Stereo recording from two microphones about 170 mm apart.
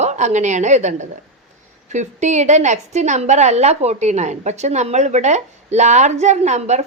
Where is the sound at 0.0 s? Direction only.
40° right (ahead or behind).